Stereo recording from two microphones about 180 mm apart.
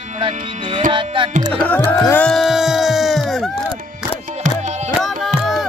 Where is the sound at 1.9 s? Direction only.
15° left (ahead or behind).